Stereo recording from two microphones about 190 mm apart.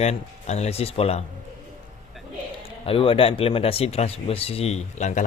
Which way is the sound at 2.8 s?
30° left (ahead or behind).